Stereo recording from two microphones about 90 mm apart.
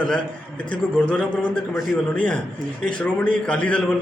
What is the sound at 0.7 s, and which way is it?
A man's voice, 15° left (ahead or behind).